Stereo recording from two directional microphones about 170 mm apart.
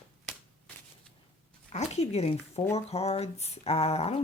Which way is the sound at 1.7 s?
40° left (ahead or behind).